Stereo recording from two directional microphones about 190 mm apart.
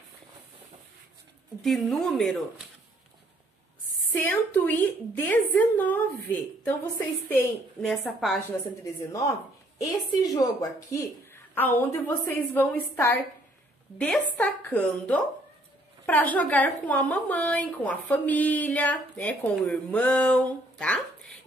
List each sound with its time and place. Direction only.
1.6 s a woman's voice: centre (ahead or behind)
4.1 s a woman's voice: 10° left (ahead or behind)
9.1 s a woman's voice: 15° left (ahead or behind)